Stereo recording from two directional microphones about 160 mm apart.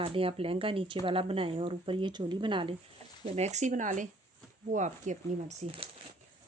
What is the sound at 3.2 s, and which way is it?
Speech, 45° right (ahead or behind).